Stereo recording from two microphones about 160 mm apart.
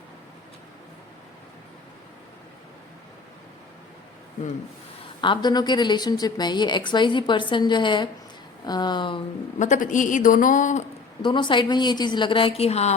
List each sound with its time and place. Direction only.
5.2 s a woman's voice: 30° left (ahead or behind)
9.6 s a woman's voice: 50° left (ahead or behind)
11.2 s a woman's voice: 30° left (ahead or behind)